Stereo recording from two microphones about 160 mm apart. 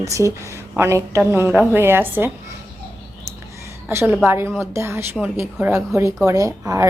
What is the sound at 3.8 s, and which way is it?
Speech, 10° right (ahead or behind).